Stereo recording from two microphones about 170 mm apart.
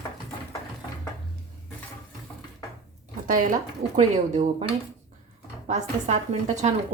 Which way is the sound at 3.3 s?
50° right (ahead or behind).